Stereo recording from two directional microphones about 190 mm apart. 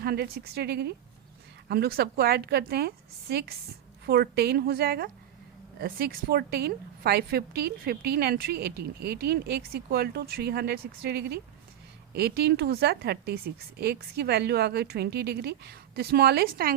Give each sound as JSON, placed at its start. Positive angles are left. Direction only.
{"t": 0.0, "sound": "a woman's voice", "side_deg": -55}